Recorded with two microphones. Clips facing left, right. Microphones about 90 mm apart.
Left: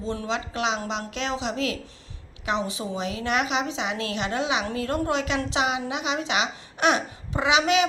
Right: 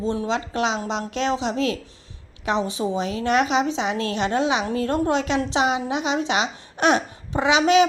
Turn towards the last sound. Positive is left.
turn(degrees=-35)  # may be behind; listen again after turning